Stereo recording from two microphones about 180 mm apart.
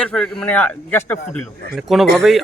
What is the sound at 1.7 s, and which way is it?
Speech, centre (ahead or behind).